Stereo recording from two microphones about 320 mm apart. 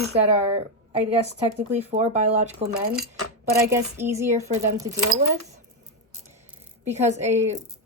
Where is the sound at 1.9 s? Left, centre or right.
Right.